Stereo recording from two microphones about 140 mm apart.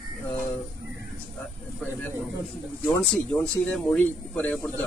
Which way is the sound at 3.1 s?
5° left (ahead or behind).